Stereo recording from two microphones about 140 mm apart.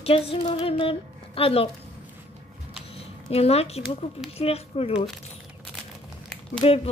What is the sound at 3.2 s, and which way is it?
Speech, 45° left (ahead or behind).